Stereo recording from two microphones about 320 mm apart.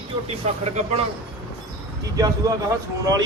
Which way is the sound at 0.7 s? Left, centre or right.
Centre.